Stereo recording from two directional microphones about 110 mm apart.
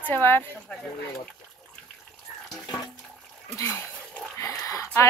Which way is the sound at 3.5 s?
20° left (ahead or behind).